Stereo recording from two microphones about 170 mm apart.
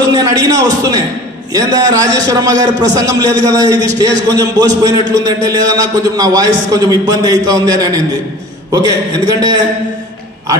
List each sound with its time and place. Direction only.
0.1 s a man's voice: 25° right (ahead or behind)